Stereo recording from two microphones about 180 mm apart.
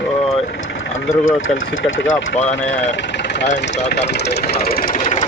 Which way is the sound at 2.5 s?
10° left (ahead or behind).